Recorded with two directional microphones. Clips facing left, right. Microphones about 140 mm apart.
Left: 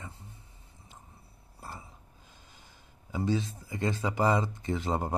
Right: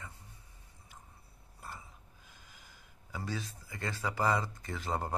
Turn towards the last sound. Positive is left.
turn(degrees=20)  # may be behind; listen again after turning